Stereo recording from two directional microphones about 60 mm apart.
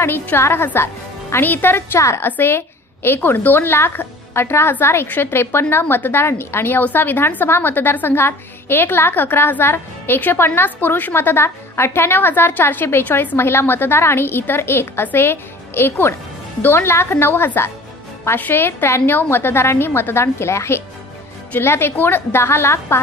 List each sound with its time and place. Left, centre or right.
0.0 s a woman's voice: left
2.0 s a woman's voice: left
2.2 s a woman's voice: left